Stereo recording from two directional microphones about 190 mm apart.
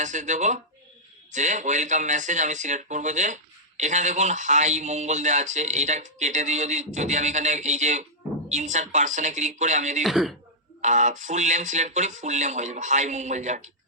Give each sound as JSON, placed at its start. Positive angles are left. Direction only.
{"t": 0.0, "sound": "speech", "side_deg": -40}
{"t": 10.0, "sound": "speech", "side_deg": 0}
{"t": 10.8, "sound": "speech", "side_deg": -40}